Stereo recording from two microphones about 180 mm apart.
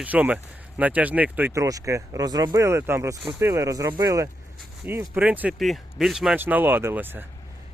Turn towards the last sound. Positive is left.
turn(degrees=-10)  # may be behind; listen again after turning